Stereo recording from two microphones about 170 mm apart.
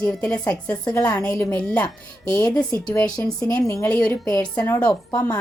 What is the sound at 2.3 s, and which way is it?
A woman's voice, 20° left (ahead or behind).